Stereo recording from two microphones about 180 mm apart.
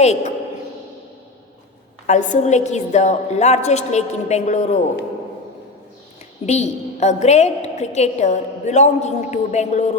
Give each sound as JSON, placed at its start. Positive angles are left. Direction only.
{"t": 0.0, "sound": "a woman's voice", "side_deg": 40}
{"t": 2.0, "sound": "a woman's voice", "side_deg": 40}
{"t": 6.4, "sound": "a woman's voice", "side_deg": 40}